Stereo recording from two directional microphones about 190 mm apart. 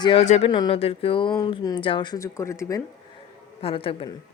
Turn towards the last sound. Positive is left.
turn(degrees=30)  # may be behind; listen again after turning